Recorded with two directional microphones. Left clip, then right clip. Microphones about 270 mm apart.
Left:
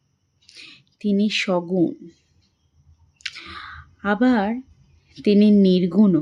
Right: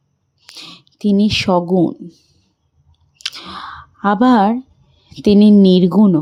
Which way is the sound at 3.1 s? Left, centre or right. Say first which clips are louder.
Right 7 dB; centre.